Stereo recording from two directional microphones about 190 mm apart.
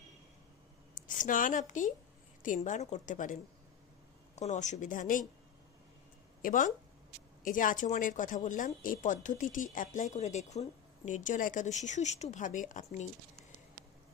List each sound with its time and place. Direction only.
0.9 s a woman's voice: 45° left (ahead or behind)
4.4 s speech: 40° left (ahead or behind)
6.4 s a woman's voice: 45° left (ahead or behind)